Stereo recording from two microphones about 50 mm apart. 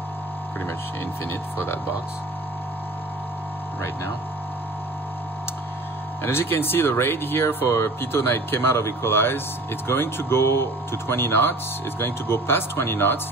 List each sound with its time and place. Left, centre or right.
6.2 s speech: left